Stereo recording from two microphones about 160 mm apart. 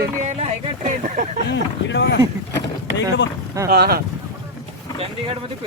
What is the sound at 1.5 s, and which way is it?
Speech, 90° left.